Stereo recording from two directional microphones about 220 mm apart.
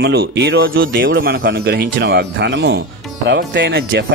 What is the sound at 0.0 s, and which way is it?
Speech, 50° right (ahead or behind).